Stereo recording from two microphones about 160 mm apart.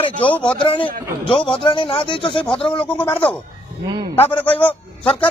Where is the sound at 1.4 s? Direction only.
30° left (ahead or behind).